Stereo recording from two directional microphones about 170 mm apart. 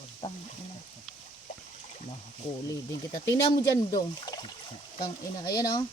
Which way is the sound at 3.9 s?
25° left (ahead or behind).